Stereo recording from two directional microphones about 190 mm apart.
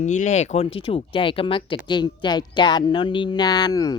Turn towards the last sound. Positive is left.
turn(degrees=20)  # may be behind; listen again after turning